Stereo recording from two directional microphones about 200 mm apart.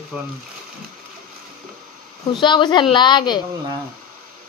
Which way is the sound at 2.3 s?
25° left (ahead or behind).